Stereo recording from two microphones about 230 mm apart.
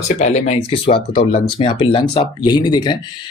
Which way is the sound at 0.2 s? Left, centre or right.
Left.